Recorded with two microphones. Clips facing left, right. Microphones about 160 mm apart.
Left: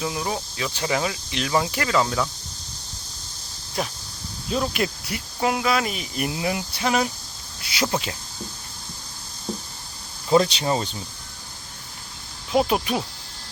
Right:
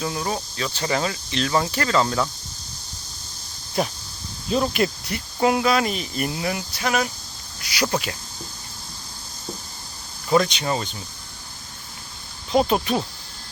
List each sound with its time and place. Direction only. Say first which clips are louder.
0.0 s speech: right 1 dB; 10° left (ahead or behind)
4.5 s speech: right 3 dB; centre (ahead or behind); by 8.1 s 20° left (ahead or behind)
10.2 s speech: left 1 dB; 25° left (ahead or behind)
12.5 s speech: right 1 dB; 5° left (ahead or behind)